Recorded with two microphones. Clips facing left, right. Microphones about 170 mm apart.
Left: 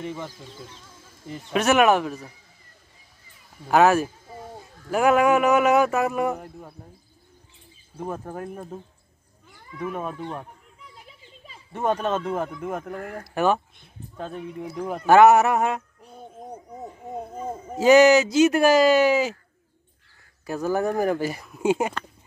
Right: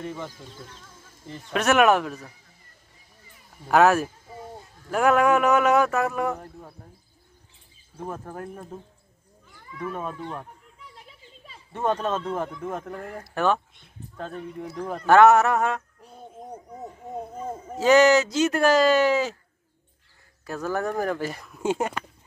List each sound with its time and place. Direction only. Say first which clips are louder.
0.0 s speech: left 1 dB; 10° left (ahead or behind)
3.6 s speech: left 1 dB; centre (ahead or behind)
8.0 s speech: left 3 dB; 15° left (ahead or behind)
9.8 s speech: left 2 dB; 10° left (ahead or behind)
11.4 s speech: left 1 dB; 10° left (ahead or behind)
17.5 s speech: left 3 dB; 10° left (ahead or behind)
20.4 s speech: left 4 dB; 10° left (ahead or behind)